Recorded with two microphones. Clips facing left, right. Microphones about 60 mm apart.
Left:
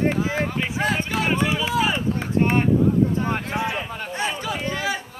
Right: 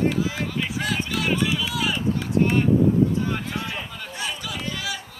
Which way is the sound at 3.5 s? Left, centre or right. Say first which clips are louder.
Left 5 dB; left.